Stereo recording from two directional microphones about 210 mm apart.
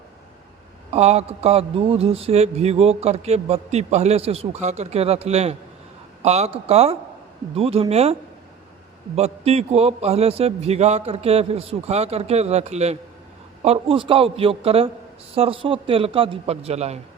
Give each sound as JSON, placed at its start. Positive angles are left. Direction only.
{"t": 0.9, "sound": "a man's voice", "side_deg": -30}
{"t": 9.1, "sound": "a man's voice", "side_deg": -30}